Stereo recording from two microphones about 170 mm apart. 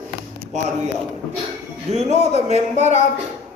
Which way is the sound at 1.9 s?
40° right (ahead or behind).